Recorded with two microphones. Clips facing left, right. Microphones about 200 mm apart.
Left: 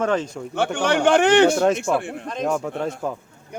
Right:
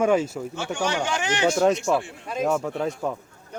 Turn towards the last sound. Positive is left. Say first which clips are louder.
# left 1 dB
turn(degrees=0)  # may be behind; listen again after turning